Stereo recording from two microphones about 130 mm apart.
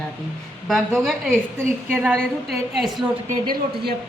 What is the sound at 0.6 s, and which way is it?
A woman's voice, centre (ahead or behind).